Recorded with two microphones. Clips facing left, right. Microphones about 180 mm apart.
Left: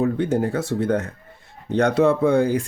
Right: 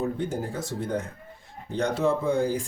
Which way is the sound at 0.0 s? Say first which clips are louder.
Left 8 dB; 70° left (ahead or behind).